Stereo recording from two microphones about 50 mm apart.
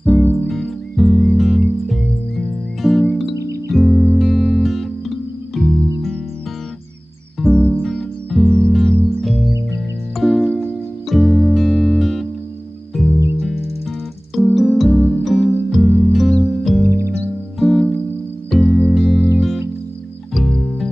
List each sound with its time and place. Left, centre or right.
0.2 s music: left
0.5 s music: centre
7.4 s music: left
7.8 s music: centre
8.5 s music: centre
9.2 s music: centre
14.3 s music: centre
20.3 s music: centre